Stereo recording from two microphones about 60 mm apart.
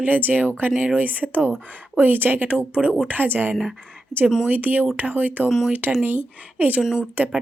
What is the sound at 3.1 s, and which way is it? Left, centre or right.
Speech, right.